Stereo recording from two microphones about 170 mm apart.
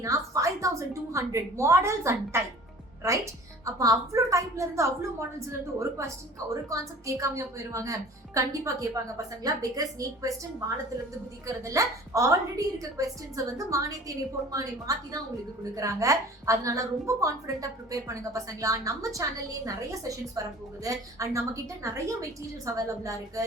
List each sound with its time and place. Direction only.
0.0 s a woman's voice: 20° right (ahead or behind)
11.4 s a woman's voice: 20° right (ahead or behind)